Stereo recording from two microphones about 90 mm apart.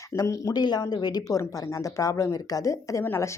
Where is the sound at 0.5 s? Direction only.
50° left (ahead or behind).